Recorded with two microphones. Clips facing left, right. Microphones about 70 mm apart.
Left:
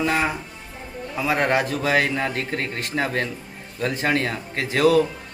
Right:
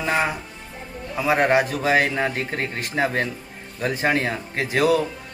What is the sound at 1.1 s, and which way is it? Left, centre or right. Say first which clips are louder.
A man's voice: right 3 dB; centre.